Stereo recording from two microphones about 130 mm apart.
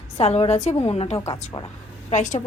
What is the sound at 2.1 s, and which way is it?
Speech, 70° left (ahead or behind).